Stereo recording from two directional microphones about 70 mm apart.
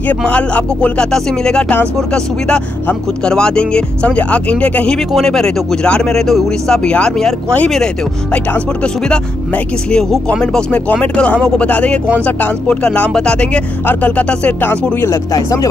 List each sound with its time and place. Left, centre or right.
0.1 s speech: centre
4.9 s speech: centre; by 15.1 s left
15.3 s speech: left